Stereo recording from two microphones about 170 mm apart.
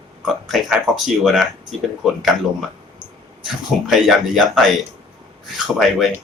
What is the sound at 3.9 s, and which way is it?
Speech, centre (ahead or behind).